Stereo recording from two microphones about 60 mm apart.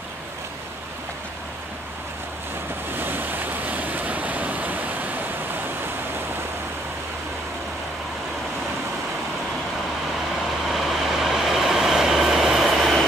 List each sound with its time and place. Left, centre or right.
2.9 s waves: right
10.7 s train: centre